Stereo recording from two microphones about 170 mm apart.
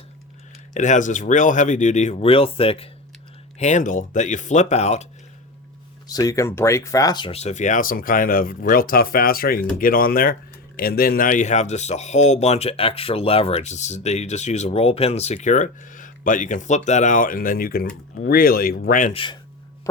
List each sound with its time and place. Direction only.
0.7 s speech: 45° left (ahead or behind)
3.6 s speech: 45° left (ahead or behind)
6.1 s speech: 20° left (ahead or behind); by 19.1 s 50° left (ahead or behind)
19.1 s speech: 30° left (ahead or behind)